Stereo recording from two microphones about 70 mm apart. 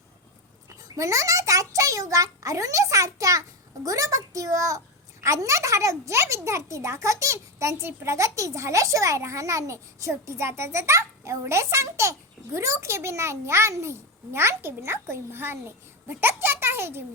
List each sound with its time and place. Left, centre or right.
0.7 s a child's voice: right